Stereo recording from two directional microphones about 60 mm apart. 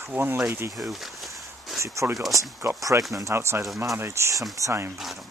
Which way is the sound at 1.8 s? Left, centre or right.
Right.